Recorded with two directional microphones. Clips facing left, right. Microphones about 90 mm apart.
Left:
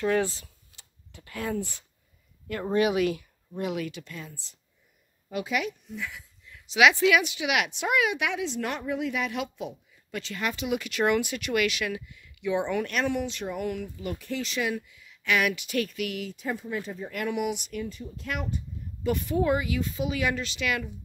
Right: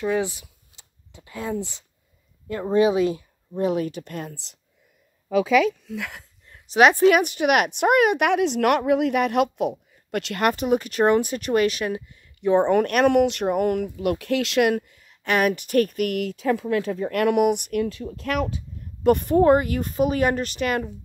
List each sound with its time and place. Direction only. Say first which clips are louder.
0.0 s speech: right 2 dB; 15° right (ahead or behind); by 4.6 s 65° right (ahead or behind)
5.9 s speech: right 5 dB; 75° right (ahead or behind)
6.4 s a woman's voice: right 5 dB; 45° right (ahead or behind); by 18.6 s 75° right (ahead or behind)
19.0 s speech: right 9 dB; 50° right (ahead or behind)